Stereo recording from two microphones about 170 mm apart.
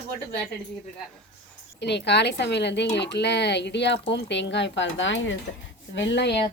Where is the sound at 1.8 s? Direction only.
90° left.